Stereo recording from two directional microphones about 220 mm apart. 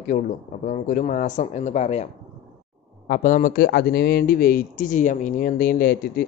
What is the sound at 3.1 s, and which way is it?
A man's voice, 35° left (ahead or behind).